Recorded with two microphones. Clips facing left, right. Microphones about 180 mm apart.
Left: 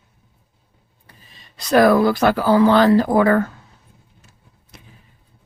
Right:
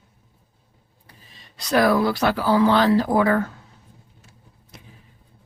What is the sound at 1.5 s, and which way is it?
Speech, 50° left (ahead or behind).